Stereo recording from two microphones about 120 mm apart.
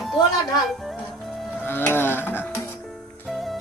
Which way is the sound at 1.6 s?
20° left (ahead or behind).